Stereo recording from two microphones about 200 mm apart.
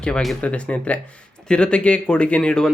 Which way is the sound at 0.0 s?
Centre (ahead or behind).